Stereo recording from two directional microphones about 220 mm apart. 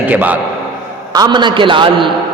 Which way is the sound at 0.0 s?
5° right (ahead or behind).